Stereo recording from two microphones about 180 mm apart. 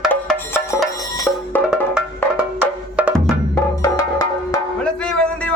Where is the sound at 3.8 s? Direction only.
20° left (ahead or behind).